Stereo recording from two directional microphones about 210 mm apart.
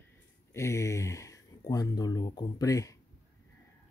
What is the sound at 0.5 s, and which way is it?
Speech, 15° left (ahead or behind).